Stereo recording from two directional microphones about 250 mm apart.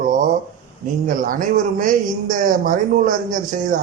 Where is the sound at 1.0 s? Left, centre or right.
Right.